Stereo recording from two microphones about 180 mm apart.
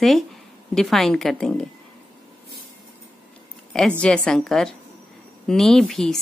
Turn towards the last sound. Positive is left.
turn(degrees=5)  # may be behind; listen again after turning